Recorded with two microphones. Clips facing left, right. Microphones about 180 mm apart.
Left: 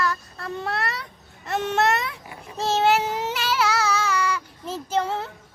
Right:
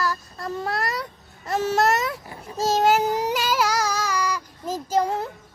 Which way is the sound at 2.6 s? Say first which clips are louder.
Right 1 dB; 40° right (ahead or behind).